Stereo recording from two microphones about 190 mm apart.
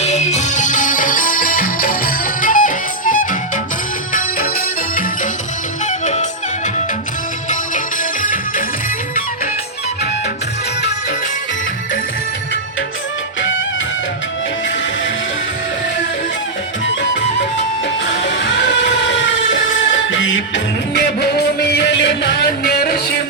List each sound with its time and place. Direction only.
0.0 s music: 35° left (ahead or behind)
8.2 s music: 45° left (ahead or behind)
18.3 s music: 70° left (ahead or behind)
21.2 s music: 60° left (ahead or behind)